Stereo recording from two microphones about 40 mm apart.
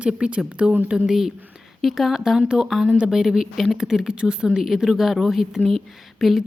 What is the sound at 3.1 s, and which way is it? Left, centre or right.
Speech, centre.